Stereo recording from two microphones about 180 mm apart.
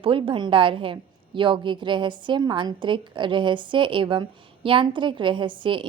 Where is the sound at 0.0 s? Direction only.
30° right (ahead or behind).